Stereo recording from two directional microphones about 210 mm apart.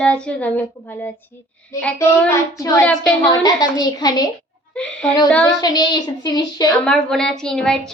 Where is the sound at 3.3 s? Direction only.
20° left (ahead or behind).